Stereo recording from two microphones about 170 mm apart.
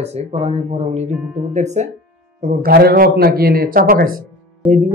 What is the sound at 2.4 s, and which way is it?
Speech, 55° right (ahead or behind).